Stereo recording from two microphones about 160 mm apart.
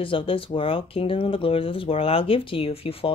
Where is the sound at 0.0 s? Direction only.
35° left (ahead or behind).